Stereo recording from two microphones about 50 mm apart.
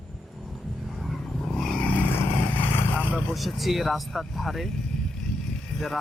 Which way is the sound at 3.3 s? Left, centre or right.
Centre.